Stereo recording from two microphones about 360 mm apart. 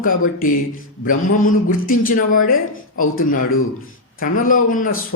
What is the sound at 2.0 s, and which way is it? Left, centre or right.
Speech, left.